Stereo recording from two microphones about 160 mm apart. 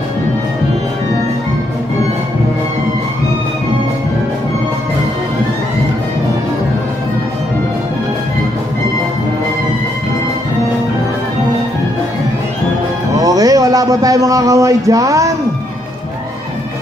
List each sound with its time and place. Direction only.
13.1 s speech: 20° right (ahead or behind)